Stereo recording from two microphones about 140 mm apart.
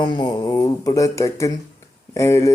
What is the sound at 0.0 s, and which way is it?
Speech, 35° left (ahead or behind).